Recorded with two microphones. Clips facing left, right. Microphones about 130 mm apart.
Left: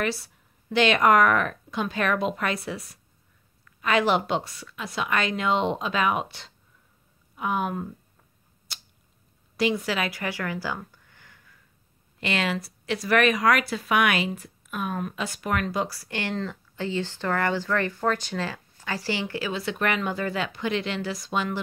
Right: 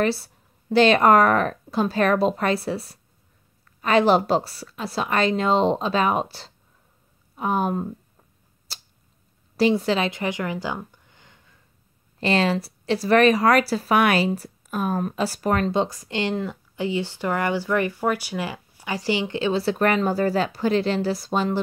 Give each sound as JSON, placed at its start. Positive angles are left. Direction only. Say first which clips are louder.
{"t": 0.0, "sound": "speech", "louder": "right 6 dB", "side_deg": -30}
{"t": 8.7, "sound": "a sound", "louder": "right 2 dB", "side_deg": -30}
{"t": 9.6, "sound": "speech", "louder": "right 5 dB", "side_deg": -30}
{"t": 12.2, "sound": "speech", "louder": "right 6 dB", "side_deg": -30}